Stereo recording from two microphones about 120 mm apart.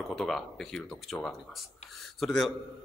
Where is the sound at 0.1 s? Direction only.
Centre (ahead or behind).